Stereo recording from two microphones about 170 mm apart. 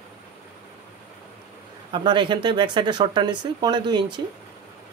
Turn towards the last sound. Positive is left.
turn(degrees=-25)  # may be behind; listen again after turning